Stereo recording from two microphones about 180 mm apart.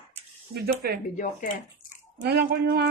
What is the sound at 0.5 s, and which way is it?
Speech, 60° right (ahead or behind).